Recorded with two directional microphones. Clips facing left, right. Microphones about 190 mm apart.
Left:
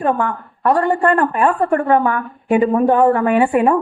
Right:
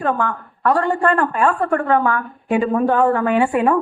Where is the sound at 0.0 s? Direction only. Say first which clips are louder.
Left 2 dB; 15° left (ahead or behind).